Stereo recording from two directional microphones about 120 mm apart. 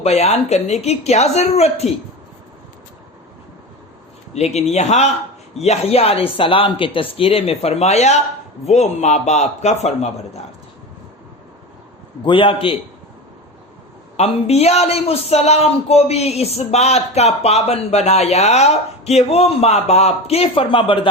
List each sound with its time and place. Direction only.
0.0 s speech: 65° left (ahead or behind)
4.4 s a man's voice: 65° left (ahead or behind)
12.2 s speech: 45° left (ahead or behind)
14.2 s speech: 60° left (ahead or behind)